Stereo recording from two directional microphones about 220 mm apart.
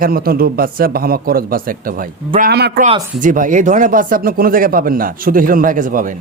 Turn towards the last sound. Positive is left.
turn(degrees=-40)  # may be behind; listen again after turning